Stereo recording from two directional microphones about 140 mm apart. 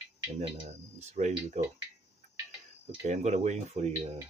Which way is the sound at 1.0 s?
55° right (ahead or behind).